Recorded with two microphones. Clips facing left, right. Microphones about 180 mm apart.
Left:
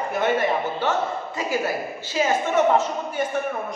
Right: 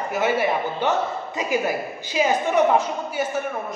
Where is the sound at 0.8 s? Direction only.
15° right (ahead or behind).